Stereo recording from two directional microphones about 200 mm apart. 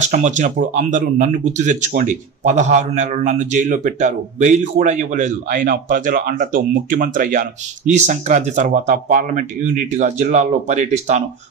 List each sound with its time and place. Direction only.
0.0 s speech: 35° right (ahead or behind)